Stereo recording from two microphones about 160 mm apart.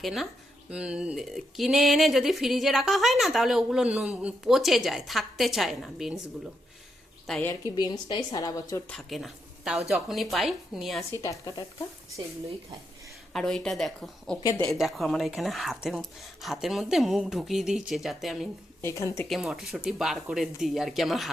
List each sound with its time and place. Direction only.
0.0 s speech: centre (ahead or behind)
7.8 s a woman's voice: 25° left (ahead or behind)
8.9 s speech: centre (ahead or behind)
11.2 s a woman's voice: 20° left (ahead or behind)
13.3 s speech: 5° left (ahead or behind)
18.8 s speech: 15° left (ahead or behind)
19.3 s speech: centre (ahead or behind)